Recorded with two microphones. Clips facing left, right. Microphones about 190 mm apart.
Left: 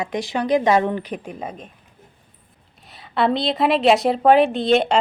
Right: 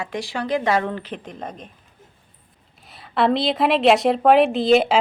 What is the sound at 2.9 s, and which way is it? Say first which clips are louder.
A woman's voice: right 1 dB; centre (ahead or behind).